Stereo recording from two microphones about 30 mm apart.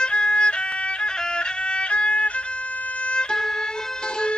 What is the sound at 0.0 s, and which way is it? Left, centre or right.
Music, left.